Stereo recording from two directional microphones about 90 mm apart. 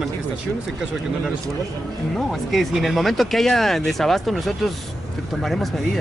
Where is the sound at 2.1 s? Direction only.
Centre (ahead or behind).